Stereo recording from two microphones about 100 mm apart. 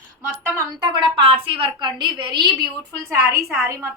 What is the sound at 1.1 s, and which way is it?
A woman's voice, 65° right (ahead or behind).